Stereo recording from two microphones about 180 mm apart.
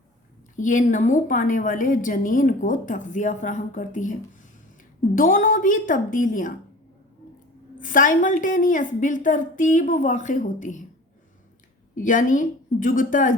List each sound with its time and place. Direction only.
0.5 s a woman's voice: 45° left (ahead or behind)
5.1 s a woman's voice: 50° left (ahead or behind)
7.8 s a woman's voice: 45° left (ahead or behind)
11.9 s a woman's voice: 45° left (ahead or behind)